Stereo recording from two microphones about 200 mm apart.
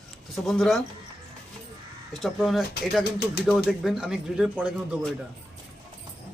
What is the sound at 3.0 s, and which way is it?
Speech, 55° left (ahead or behind).